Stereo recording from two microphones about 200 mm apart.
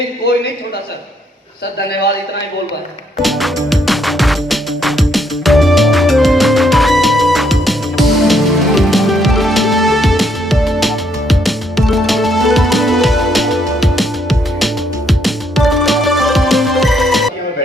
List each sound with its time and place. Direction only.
3.2 s music: centre (ahead or behind)